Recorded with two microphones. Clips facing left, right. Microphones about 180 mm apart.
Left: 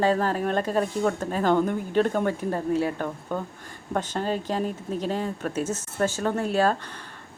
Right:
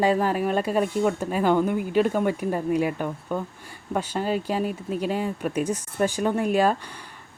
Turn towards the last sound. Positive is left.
turn(degrees=-15)  # may be behind; listen again after turning